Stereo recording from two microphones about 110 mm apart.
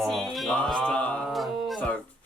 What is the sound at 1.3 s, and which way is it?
Music, centre (ahead or behind).